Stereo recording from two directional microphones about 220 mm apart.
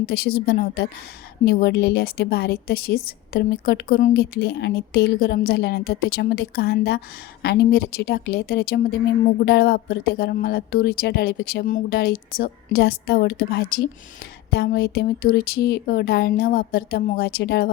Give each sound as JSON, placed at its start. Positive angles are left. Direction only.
{"t": 0.0, "sound": "a woman's voice", "side_deg": 45}